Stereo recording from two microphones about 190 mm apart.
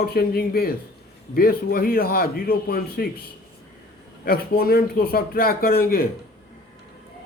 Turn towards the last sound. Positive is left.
turn(degrees=50)  # may be behind; listen again after turning